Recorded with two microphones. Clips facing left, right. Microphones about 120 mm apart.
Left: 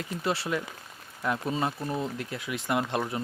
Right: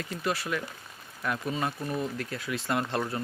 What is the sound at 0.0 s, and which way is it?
Speech, 25° left (ahead or behind).